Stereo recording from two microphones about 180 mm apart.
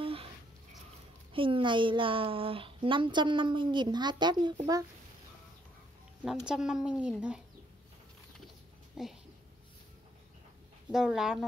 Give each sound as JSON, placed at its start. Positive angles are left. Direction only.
{"t": 0.0, "sound": "a sound", "side_deg": -30}
{"t": 1.3, "sound": "speech", "side_deg": -30}
{"t": 6.4, "sound": "speech", "side_deg": -5}
{"t": 9.0, "sound": "speech", "side_deg": -5}
{"t": 10.9, "sound": "speech", "side_deg": 0}